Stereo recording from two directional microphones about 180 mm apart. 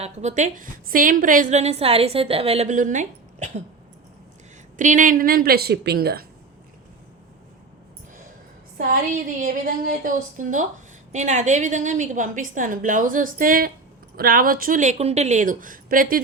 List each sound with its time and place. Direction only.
0.0 s a woman's voice: 40° right (ahead or behind)
4.8 s a woman's voice: 45° right (ahead or behind)
9.4 s a woman's voice: 50° right (ahead or behind)